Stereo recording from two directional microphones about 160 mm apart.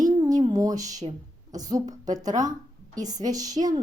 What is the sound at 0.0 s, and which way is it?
A woman's voice, 25° right (ahead or behind).